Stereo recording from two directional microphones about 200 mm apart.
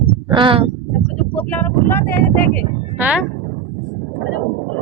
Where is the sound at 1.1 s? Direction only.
10° left (ahead or behind).